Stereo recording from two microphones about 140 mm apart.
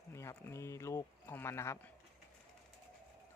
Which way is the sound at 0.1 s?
20° left (ahead or behind).